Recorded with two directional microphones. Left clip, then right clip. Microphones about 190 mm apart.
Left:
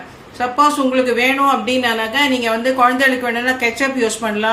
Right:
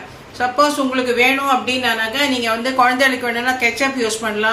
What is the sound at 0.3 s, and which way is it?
A woman's voice, 45° left (ahead or behind).